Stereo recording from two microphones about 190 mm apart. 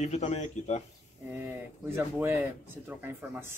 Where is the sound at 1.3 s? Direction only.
10° right (ahead or behind).